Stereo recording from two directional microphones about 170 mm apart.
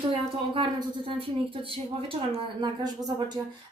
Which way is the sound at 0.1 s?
30° right (ahead or behind).